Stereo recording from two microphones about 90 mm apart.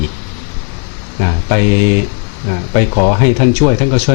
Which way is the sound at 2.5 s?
15° left (ahead or behind).